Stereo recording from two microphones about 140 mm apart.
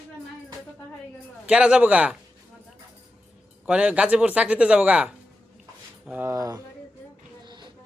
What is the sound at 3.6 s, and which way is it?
Speech, 10° right (ahead or behind).